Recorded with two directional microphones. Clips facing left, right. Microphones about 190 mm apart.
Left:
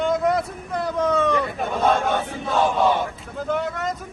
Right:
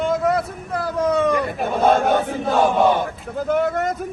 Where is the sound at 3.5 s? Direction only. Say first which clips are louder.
Right 5 dB; 50° right (ahead or behind).